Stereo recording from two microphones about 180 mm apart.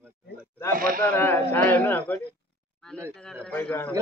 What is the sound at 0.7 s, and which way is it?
Speech, 50° right (ahead or behind).